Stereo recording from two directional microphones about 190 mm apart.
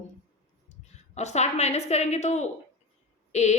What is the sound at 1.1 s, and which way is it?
A woman's voice, 35° left (ahead or behind).